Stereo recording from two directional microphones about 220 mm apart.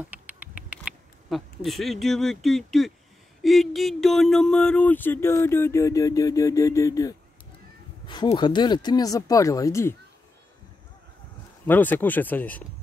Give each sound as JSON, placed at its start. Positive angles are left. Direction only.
{"t": 0.0, "sound": "a sound", "side_deg": -5}
{"t": 3.4, "sound": "speech", "side_deg": 0}
{"t": 11.6, "sound": "speech", "side_deg": 10}